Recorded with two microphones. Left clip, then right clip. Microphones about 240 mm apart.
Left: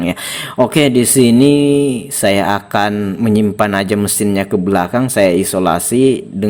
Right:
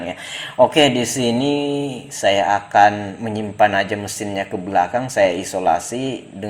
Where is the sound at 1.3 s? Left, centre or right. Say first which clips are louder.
Left 9 dB; left.